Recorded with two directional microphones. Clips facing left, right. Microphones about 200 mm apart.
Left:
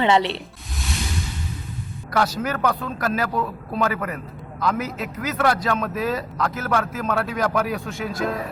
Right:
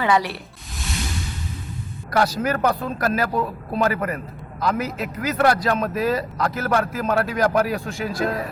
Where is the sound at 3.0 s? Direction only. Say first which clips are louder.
Right 2 dB; centre (ahead or behind).